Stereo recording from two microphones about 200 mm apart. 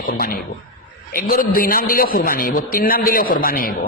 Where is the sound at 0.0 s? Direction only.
45° left (ahead or behind).